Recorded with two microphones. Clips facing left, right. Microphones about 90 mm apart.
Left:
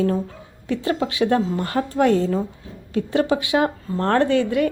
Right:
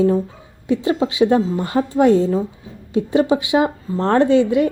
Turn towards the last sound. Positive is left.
turn(degrees=-20)  # may be behind; listen again after turning